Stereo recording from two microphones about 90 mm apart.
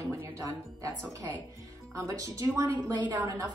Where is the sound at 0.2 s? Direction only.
35° right (ahead or behind).